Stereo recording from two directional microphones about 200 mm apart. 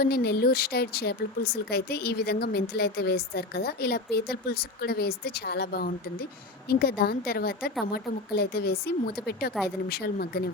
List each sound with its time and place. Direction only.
0.0 s a woman's voice: 50° left (ahead or behind)